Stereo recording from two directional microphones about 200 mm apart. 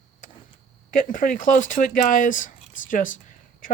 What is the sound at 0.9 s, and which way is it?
Speech, 40° left (ahead or behind).